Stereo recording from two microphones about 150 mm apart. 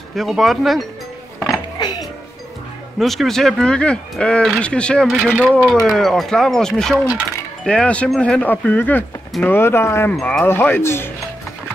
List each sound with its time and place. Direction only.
0.1 s speech: centre (ahead or behind)
1.5 s music: 30° left (ahead or behind)
3.0 s speech: centre (ahead or behind)
7.6 s wind chime: 5° left (ahead or behind)
10.1 s speech: centre (ahead or behind)
10.4 s wind chime: 15° left (ahead or behind)